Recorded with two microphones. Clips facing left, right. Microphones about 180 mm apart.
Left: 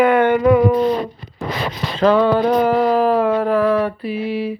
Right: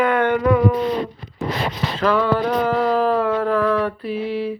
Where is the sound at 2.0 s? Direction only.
25° left (ahead or behind).